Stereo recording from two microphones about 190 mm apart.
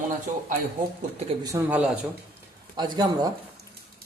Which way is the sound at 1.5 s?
10° right (ahead or behind).